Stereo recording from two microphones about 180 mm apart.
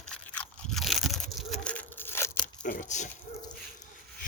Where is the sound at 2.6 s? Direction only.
45° left (ahead or behind).